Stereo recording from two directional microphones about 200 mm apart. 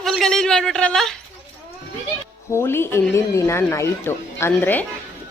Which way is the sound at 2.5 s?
10° left (ahead or behind).